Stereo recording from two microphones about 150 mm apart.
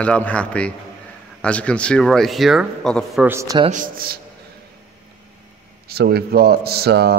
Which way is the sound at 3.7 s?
65° right (ahead or behind).